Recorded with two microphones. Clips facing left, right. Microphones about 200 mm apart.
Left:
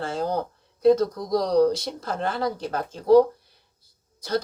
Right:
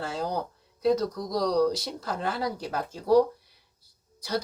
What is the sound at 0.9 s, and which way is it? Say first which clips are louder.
Speech: left 6 dB; 50° left (ahead or behind).